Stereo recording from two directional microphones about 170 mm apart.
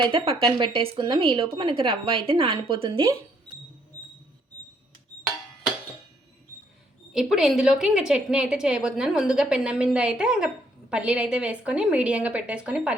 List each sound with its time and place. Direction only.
0.1 s speech: 30° right (ahead or behind)
3.5 s music: 10° left (ahead or behind)
7.1 s a woman's voice: centre (ahead or behind)